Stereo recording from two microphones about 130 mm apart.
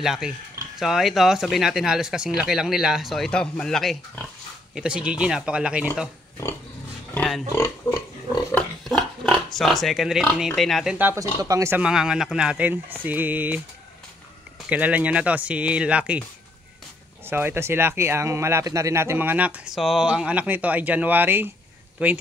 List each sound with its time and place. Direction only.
0.0 s speech: centre (ahead or behind)
7.2 s pig: 5° left (ahead or behind)
7.5 s speech: 20° left (ahead or behind)
8.8 s speech: 5° left (ahead or behind)
11.1 s speech: 25° right (ahead or behind)
11.8 s speech: 5° right (ahead or behind)
14.7 s speech: 10° right (ahead or behind)
17.3 s speech: 15° right (ahead or behind)